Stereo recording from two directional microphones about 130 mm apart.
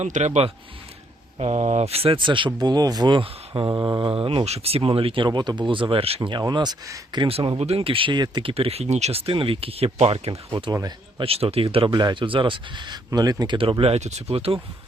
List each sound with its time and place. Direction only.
0.0 s a man's voice: 65° right (ahead or behind); by 4.1 s 30° right (ahead or behind)
4.1 s speech: 40° right (ahead or behind)
6.4 s a man's voice: 35° right (ahead or behind)
7.2 s speech: 45° right (ahead or behind)
11.9 s a man's voice: 35° right (ahead or behind)
13.6 s speech: 45° right (ahead or behind)